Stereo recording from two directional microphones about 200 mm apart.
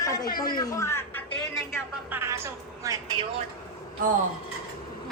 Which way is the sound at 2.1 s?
10° right (ahead or behind).